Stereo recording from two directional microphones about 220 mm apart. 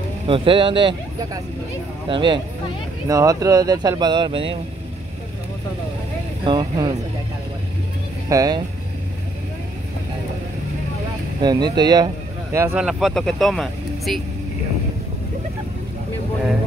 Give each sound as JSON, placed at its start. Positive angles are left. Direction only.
{"t": 0.3, "sound": "speech", "side_deg": -25}
{"t": 6.4, "sound": "speech", "side_deg": -20}
{"t": 8.3, "sound": "speech", "side_deg": -15}
{"t": 11.4, "sound": "speech", "side_deg": -20}
{"t": 12.8, "sound": "speech", "side_deg": 0}